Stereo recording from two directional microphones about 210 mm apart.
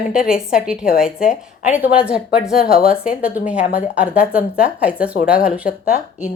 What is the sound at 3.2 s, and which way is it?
A woman's voice, 5° right (ahead or behind).